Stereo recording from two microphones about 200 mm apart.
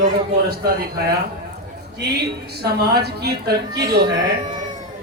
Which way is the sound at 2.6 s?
55° right (ahead or behind).